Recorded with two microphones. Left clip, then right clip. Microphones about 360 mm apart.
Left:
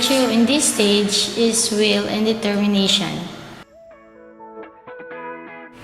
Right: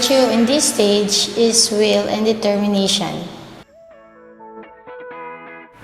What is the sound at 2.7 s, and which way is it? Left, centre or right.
Speech, right.